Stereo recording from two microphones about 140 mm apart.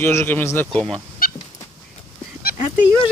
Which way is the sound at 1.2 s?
90° left.